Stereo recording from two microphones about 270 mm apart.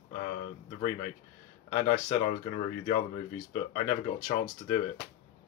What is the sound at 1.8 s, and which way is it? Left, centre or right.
Speech, left.